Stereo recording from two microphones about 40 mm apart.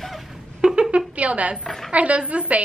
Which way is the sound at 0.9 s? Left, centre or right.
Right.